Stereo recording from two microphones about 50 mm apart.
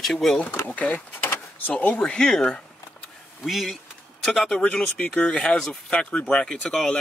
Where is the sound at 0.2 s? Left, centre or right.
Centre.